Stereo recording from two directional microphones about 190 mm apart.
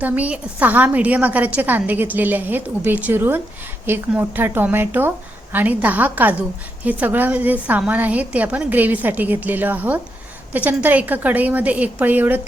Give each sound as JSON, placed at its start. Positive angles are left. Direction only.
{"t": 0.0, "sound": "a woman's voice", "side_deg": -10}